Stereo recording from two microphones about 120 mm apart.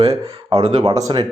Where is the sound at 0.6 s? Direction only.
60° right (ahead or behind).